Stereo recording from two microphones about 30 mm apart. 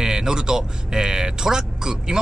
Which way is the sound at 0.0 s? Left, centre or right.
Right.